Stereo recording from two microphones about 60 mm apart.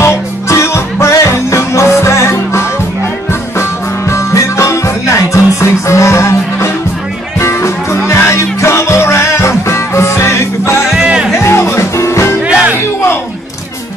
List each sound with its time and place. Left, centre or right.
0.0 s music: left
11.0 s music: centre
11.3 s music: left